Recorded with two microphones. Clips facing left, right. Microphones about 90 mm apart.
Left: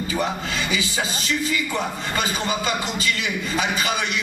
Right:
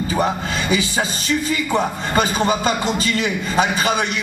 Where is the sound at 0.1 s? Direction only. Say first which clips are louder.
Right 4 dB; 35° right (ahead or behind).